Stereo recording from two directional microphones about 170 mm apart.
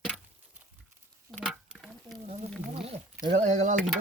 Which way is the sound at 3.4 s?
45° right (ahead or behind).